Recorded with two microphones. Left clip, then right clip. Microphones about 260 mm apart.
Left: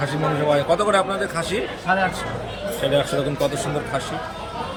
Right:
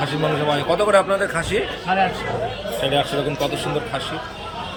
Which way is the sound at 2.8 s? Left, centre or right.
Centre.